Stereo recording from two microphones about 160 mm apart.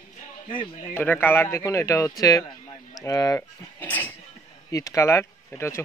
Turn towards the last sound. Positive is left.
turn(degrees=15)  # may be behind; listen again after turning